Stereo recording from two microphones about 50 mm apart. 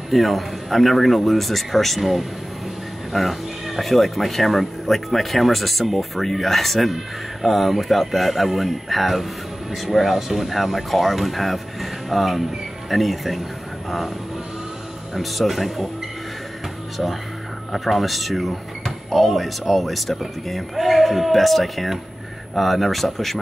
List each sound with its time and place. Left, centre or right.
0.1 s speech: centre
15.1 s speech: centre
17.7 s speech: centre